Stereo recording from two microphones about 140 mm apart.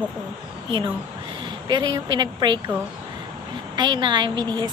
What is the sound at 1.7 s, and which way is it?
Speech, 30° right (ahead or behind).